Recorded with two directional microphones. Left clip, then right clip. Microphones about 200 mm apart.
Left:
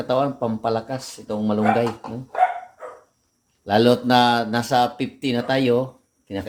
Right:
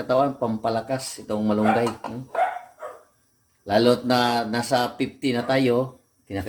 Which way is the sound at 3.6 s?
25° left (ahead or behind).